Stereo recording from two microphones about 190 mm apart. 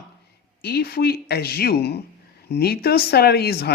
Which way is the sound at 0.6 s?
55° left (ahead or behind).